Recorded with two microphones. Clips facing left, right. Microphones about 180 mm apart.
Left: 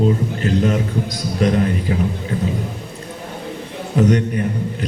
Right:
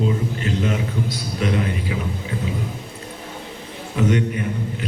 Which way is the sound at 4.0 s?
40° left (ahead or behind).